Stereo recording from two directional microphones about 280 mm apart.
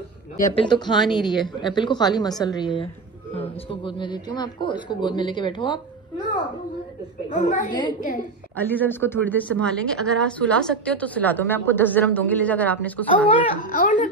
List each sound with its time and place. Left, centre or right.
0.4 s speech: left
0.7 s a man's voice: centre
7.2 s speech: left
8.5 s speech: centre
13.3 s speech: left